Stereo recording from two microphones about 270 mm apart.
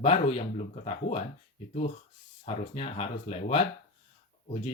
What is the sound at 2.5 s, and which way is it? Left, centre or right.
Speech, left.